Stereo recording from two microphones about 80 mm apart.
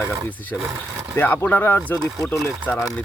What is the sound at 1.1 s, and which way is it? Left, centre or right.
Speech, left.